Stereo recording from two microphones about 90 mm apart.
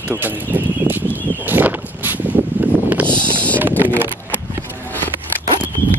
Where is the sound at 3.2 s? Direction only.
15° left (ahead or behind).